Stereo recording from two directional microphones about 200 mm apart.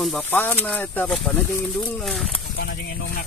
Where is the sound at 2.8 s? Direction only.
50° left (ahead or behind).